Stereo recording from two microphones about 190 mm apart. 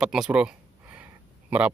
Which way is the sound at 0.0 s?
5° right (ahead or behind).